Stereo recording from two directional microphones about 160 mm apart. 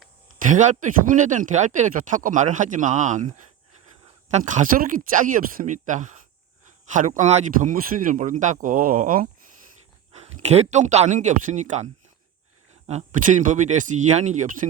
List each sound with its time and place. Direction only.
0.3 s speech: 55° right (ahead or behind)
4.3 s speech: 45° right (ahead or behind)
10.1 s speech: 40° right (ahead or behind)
12.9 s speech: 45° right (ahead or behind)